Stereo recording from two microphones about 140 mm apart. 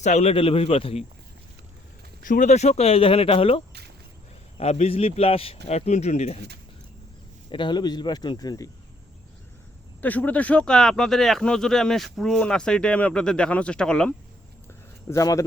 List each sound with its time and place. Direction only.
0.0 s a man's voice: 55° left (ahead or behind)
2.2 s a man's voice: 70° left (ahead or behind); by 6.4 s 55° left (ahead or behind)
7.5 s speech: 35° left (ahead or behind)
10.0 s speech: 10° left (ahead or behind)
14.7 s a sound: 25° left (ahead or behind)